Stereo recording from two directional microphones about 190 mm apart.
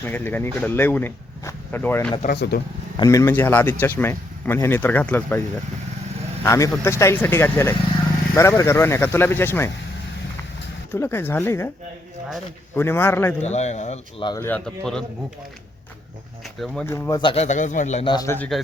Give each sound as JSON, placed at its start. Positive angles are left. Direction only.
{"t": 0.0, "sound": "speech", "side_deg": 10}
{"t": 2.2, "sound": "speech", "side_deg": 60}
{"t": 3.0, "sound": "speech", "side_deg": 15}
{"t": 6.4, "sound": "speech", "side_deg": 15}
{"t": 10.9, "sound": "speech", "side_deg": 10}
{"t": 12.7, "sound": "speech", "side_deg": 10}
{"t": 13.4, "sound": "speech", "side_deg": 35}
{"t": 14.3, "sound": "speech", "side_deg": 15}
{"t": 16.4, "sound": "speech", "side_deg": 0}
{"t": 16.8, "sound": "speech", "side_deg": 15}
{"t": 18.1, "sound": "speech", "side_deg": 10}